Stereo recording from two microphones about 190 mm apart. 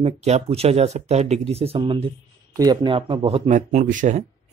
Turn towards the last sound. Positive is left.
turn(degrees=-40)  # may be behind; listen again after turning